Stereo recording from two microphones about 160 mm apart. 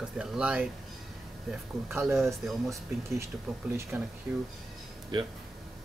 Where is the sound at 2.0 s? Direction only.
Centre (ahead or behind).